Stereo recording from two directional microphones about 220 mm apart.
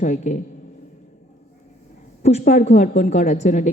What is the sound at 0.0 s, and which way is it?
Speech, 35° left (ahead or behind).